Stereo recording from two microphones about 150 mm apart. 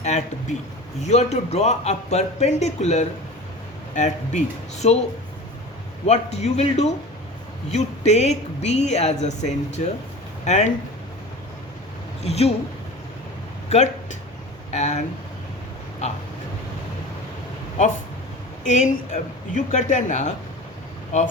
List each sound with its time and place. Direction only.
0.0 s speech: 50° left (ahead or behind)
6.1 s speech: 45° left (ahead or behind)
12.2 s speech: 45° left (ahead or behind)
13.7 s speech: 50° left (ahead or behind)
18.6 s speech: 55° left (ahead or behind)